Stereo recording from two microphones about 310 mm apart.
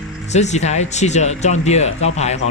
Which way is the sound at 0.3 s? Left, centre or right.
Left.